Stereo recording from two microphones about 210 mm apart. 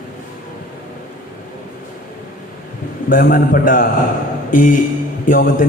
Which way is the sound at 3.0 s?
40° left (ahead or behind).